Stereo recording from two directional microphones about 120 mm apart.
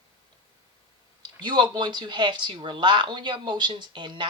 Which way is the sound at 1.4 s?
40° right (ahead or behind).